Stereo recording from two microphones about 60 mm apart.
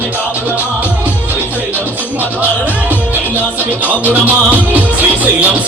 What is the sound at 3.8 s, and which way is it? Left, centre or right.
Music, left.